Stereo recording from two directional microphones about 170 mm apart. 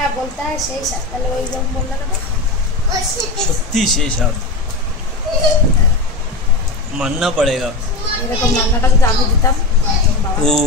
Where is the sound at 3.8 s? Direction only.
5° left (ahead or behind).